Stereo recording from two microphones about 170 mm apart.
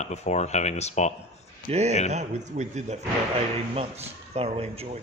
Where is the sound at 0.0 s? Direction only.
40° left (ahead or behind).